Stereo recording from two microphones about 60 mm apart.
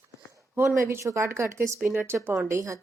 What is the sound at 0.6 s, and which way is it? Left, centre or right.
Speech, right.